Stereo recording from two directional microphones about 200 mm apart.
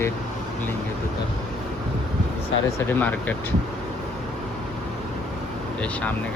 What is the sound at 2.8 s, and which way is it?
Speech, 10° left (ahead or behind).